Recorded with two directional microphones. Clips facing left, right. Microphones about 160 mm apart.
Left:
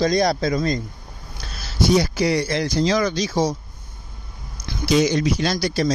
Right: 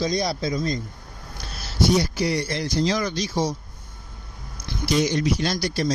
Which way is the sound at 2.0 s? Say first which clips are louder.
Left 4 dB; 90° left.